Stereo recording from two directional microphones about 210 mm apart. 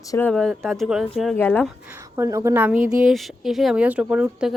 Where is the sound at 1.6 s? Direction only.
10° right (ahead or behind).